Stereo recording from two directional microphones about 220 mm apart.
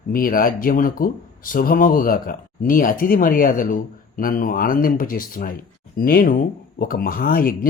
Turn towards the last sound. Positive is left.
turn(degrees=40)  # may be behind; listen again after turning